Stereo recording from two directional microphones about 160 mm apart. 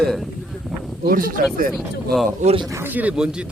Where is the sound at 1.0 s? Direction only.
65° right (ahead or behind).